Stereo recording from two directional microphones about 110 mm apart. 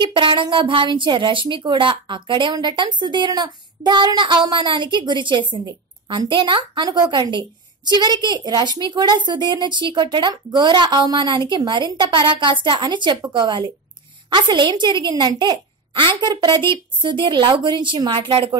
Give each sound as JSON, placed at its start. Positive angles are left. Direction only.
{"t": 0.0, "sound": "a woman's voice", "side_deg": -50}